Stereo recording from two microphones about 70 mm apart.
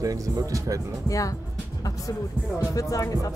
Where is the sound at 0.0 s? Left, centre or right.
Right.